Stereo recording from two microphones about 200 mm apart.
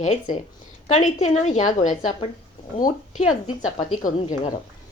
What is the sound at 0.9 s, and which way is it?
Speech, 35° left (ahead or behind).